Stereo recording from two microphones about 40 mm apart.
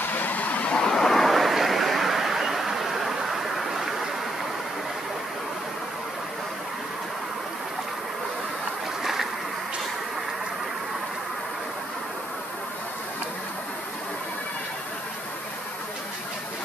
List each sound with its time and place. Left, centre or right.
0.0 s vehicle: left
0.7 s vehicle: centre
9.0 s a sound: centre